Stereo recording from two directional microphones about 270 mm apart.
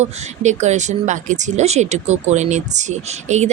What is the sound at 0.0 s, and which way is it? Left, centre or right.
Speech, right.